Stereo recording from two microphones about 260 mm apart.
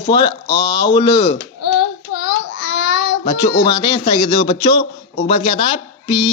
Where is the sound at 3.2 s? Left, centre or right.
Left.